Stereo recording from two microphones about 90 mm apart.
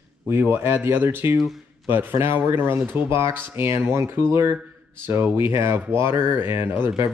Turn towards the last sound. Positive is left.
turn(degrees=-25)  # may be behind; listen again after turning